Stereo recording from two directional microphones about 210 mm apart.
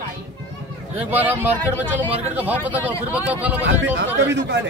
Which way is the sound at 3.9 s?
60° right (ahead or behind).